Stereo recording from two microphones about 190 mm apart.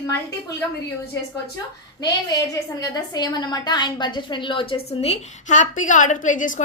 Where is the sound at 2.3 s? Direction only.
20° left (ahead or behind).